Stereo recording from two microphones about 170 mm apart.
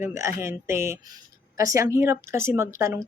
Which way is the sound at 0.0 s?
15° right (ahead or behind).